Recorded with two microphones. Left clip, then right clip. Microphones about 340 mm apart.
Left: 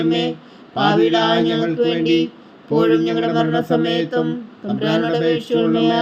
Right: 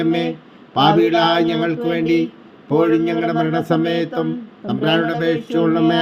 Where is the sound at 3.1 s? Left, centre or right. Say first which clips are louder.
Left 1 dB; centre.